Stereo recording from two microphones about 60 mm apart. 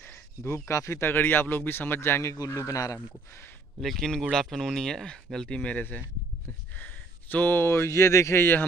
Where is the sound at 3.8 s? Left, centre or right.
Centre; by 8.4 s left.